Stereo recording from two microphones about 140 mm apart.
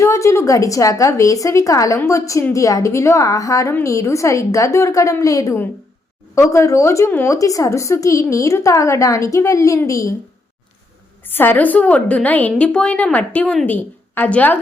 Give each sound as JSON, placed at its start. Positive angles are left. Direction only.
{"t": 0.0, "sound": "speech", "side_deg": 20}
{"t": 11.3, "sound": "a woman's voice", "side_deg": 15}